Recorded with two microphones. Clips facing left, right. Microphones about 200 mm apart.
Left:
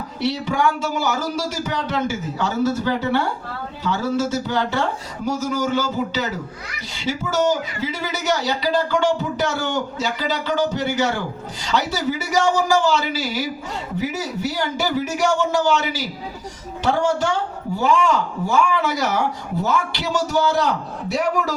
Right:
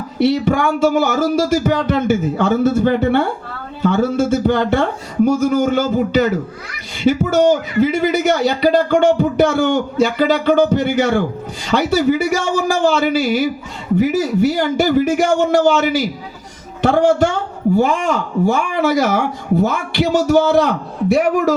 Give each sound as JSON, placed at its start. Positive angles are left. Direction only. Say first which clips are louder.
{"t": 0.2, "sound": "a man's voice", "louder": "right 7 dB", "side_deg": -55}